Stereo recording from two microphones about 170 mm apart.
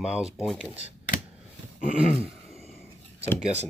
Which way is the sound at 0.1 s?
Centre (ahead or behind).